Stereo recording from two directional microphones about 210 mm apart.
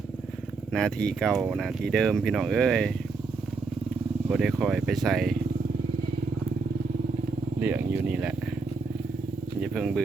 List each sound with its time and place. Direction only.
0.7 s speech: centre (ahead or behind)
4.3 s speech: centre (ahead or behind)
7.6 s speech: 5° right (ahead or behind)
9.6 s speech: centre (ahead or behind)